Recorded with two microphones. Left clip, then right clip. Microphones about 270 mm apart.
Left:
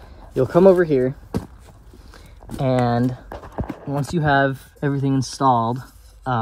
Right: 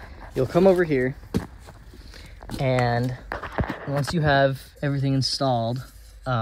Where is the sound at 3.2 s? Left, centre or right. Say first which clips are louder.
Right 3 dB; left.